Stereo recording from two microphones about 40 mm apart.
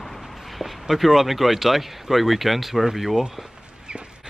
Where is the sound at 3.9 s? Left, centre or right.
Right.